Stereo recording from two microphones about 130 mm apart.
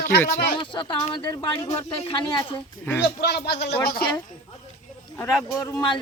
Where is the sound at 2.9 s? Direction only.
15° left (ahead or behind).